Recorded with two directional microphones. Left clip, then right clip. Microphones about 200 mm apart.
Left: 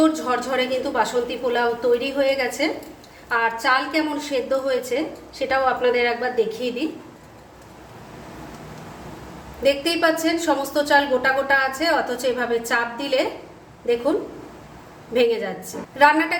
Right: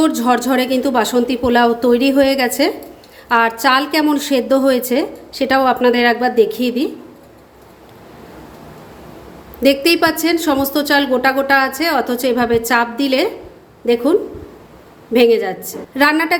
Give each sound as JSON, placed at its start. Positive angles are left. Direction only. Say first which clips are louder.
{"t": 0.0, "sound": "a woman's voice", "louder": "right 5 dB", "side_deg": -55}
{"t": 9.6, "sound": "a woman's voice", "louder": "right 6 dB", "side_deg": -50}
{"t": 15.1, "sound": "a woman's voice", "louder": "right 8 dB", "side_deg": -50}